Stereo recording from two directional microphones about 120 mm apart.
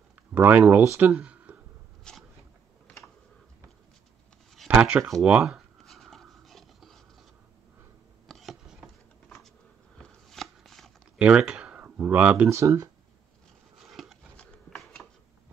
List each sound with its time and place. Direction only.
0.3 s speech: 15° right (ahead or behind)
2.1 s biting: 5° left (ahead or behind)
4.6 s writing: 10° right (ahead or behind)
8.3 s a sound: centre (ahead or behind)
11.1 s speech: 10° right (ahead or behind)
12.4 s speech: 25° right (ahead or behind)
13.8 s a sound: centre (ahead or behind)